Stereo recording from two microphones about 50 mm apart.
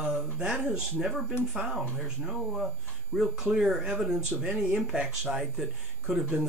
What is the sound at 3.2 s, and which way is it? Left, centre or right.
Speech, centre.